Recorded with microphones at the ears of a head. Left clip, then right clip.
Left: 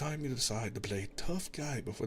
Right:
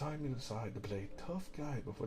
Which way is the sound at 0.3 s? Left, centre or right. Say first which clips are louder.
Left 8 dB; left.